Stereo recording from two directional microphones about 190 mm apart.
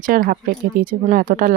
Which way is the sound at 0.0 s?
45° right (ahead or behind).